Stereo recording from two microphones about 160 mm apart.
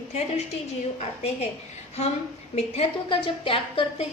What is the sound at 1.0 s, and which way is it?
Speech, 40° left (ahead or behind).